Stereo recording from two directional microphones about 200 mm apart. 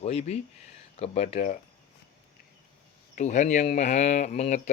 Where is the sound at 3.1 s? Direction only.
35° left (ahead or behind).